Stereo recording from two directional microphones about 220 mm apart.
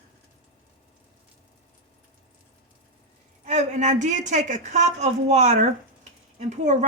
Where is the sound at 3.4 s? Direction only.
30° right (ahead or behind).